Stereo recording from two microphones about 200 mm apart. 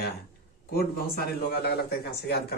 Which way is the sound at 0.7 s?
50° left (ahead or behind).